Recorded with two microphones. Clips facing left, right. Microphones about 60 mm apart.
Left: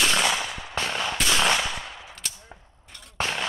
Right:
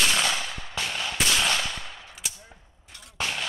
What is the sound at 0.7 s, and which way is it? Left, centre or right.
Gunshot, left.